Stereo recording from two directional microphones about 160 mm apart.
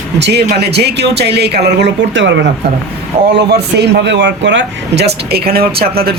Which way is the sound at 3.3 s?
90° right.